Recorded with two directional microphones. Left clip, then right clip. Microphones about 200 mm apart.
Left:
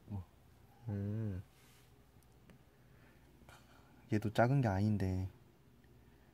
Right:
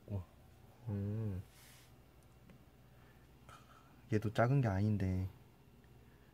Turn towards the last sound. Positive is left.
turn(degrees=15)  # may be behind; listen again after turning